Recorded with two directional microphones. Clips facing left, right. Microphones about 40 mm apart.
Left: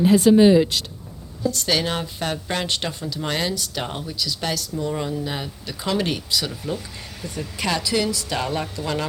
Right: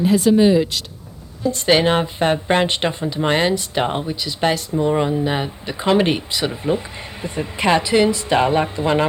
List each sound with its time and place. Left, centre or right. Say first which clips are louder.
1.5 s speech: right 7 dB; right